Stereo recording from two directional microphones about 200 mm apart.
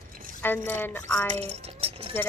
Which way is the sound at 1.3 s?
35° right (ahead or behind).